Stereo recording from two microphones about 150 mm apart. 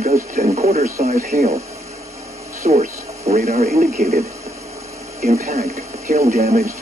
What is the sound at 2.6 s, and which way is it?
Speech, 50° right (ahead or behind).